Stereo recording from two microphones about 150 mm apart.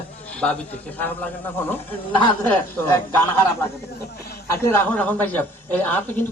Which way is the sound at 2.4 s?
15° left (ahead or behind).